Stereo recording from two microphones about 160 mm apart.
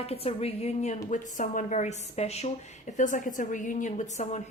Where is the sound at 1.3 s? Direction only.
55° left (ahead or behind).